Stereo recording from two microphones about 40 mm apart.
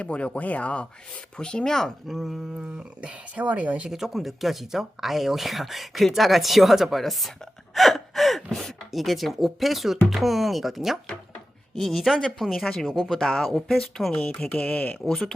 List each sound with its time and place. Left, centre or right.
0.0 s speech: left
1.4 s speech: left
2.0 s speech: centre
3.0 s speech: right
3.8 s speech: centre
7.8 s gasp: centre
8.9 s speech: centre
14.7 s speech: left